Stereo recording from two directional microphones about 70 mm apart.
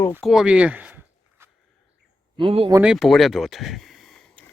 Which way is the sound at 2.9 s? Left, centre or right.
Centre.